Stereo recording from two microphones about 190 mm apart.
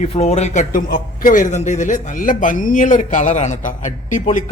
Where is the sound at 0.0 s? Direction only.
35° left (ahead or behind).